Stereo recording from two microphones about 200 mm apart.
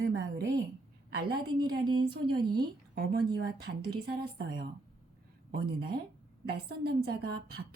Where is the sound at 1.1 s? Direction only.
55° right (ahead or behind).